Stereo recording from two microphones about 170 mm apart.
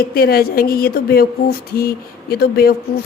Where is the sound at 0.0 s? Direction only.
60° left (ahead or behind).